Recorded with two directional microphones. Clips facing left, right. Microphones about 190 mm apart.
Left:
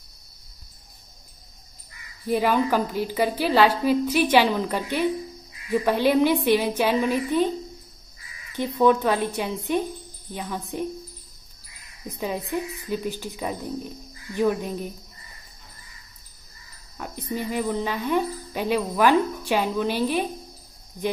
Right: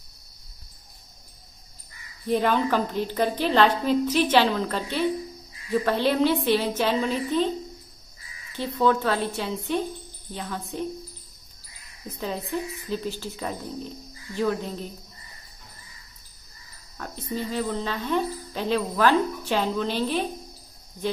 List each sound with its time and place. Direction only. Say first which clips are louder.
2.2 s speech: left 1 dB; 5° left (ahead or behind)
8.5 s speech: left 3 dB; 15° left (ahead or behind)
12.1 s speech: left 2 dB; 15° left (ahead or behind)
16.9 s speech: left 1 dB; 10° left (ahead or behind)